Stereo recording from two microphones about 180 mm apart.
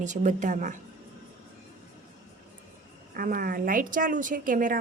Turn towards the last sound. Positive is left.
turn(degrees=-50)  # may be behind; listen again after turning